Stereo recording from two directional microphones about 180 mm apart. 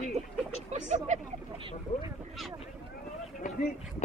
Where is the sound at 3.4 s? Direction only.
45° left (ahead or behind).